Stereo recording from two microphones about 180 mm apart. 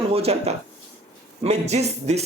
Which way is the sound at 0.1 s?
35° right (ahead or behind).